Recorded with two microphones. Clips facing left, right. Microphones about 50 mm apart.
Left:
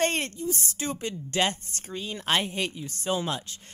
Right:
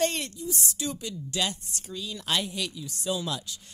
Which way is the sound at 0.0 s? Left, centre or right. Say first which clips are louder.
Left 2 dB; left.